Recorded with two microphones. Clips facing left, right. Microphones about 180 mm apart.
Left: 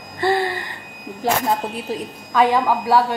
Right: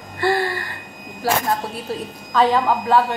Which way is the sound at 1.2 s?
20° left (ahead or behind).